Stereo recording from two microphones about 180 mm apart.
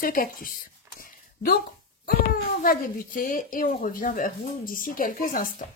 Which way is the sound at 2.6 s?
50° left (ahead or behind).